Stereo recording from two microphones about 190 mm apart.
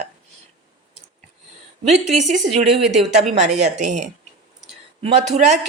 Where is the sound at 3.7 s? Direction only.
40° right (ahead or behind).